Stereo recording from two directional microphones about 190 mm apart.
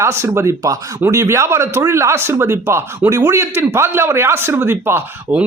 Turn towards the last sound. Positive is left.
turn(degrees=-10)  # may be behind; listen again after turning